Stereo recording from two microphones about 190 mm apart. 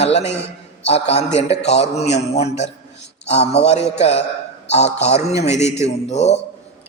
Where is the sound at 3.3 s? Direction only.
35° left (ahead or behind).